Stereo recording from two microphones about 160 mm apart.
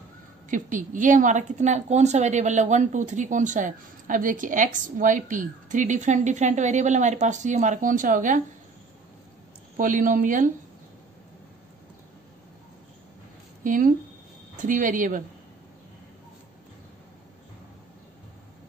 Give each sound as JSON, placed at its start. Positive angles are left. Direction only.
{"t": 0.5, "sound": "a woman's voice", "side_deg": -55}
{"t": 9.8, "sound": "speech", "side_deg": -55}
{"t": 13.7, "sound": "speech", "side_deg": -55}